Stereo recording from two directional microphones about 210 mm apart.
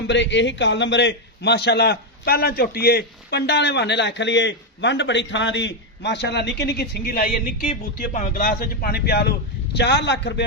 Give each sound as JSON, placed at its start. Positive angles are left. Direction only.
{"t": 0.1, "sound": "a man's voice", "side_deg": 60}